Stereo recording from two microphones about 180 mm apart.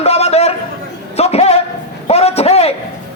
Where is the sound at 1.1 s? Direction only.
35° left (ahead or behind).